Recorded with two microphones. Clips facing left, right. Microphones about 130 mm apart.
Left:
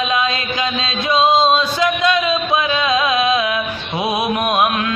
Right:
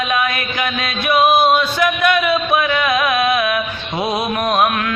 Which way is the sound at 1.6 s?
15° left (ahead or behind).